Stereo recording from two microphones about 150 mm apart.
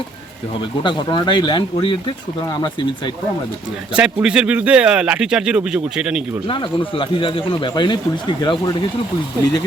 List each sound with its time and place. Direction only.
0.8 s speech: 30° left (ahead or behind)
3.9 s speech: 5° right (ahead or behind)
6.5 s speech: 35° left (ahead or behind)